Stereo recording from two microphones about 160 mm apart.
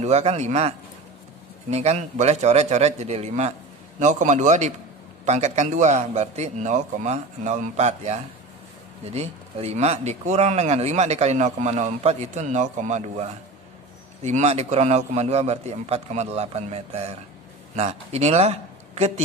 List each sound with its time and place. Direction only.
0.0 s a man's voice: 40° right (ahead or behind)